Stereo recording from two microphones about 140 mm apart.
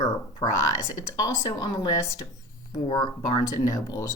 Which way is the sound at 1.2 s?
25° left (ahead or behind).